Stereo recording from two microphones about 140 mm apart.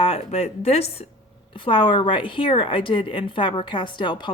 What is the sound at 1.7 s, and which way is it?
Speech, 35° left (ahead or behind).